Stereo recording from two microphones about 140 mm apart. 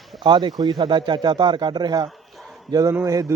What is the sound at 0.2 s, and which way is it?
A man's voice, 35° right (ahead or behind).